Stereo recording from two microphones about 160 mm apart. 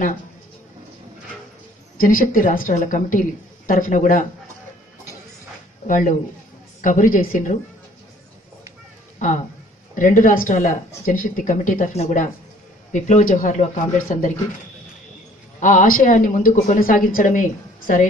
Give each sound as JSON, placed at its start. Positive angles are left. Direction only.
{"t": 2.0, "sound": "a woman's voice", "side_deg": 60}
{"t": 5.9, "sound": "a woman's voice", "side_deg": 55}
{"t": 9.9, "sound": "a woman's voice", "side_deg": 55}
{"t": 15.6, "sound": "a woman's voice", "side_deg": 55}